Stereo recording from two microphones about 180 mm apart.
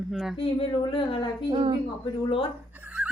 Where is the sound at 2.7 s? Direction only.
10° right (ahead or behind).